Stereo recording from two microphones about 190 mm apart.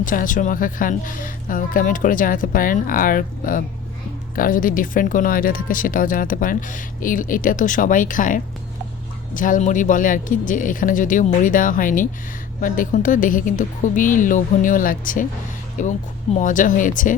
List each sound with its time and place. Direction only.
0.0 s speech: 45° left (ahead or behind)